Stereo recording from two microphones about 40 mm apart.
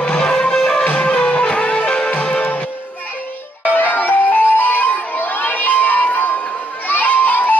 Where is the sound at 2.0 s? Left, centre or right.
Left.